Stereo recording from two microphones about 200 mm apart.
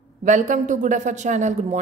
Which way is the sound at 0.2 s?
40° right (ahead or behind).